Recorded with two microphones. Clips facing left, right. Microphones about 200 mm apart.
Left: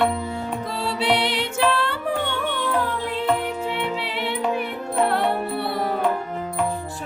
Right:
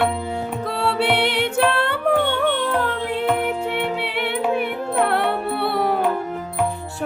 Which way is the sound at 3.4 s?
55° right (ahead or behind).